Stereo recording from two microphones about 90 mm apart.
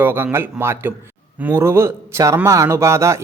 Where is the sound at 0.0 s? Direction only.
25° right (ahead or behind).